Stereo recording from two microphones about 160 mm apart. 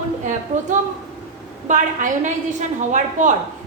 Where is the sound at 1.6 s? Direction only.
50° right (ahead or behind).